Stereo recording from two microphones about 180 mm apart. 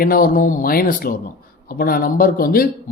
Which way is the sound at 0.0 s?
55° left (ahead or behind).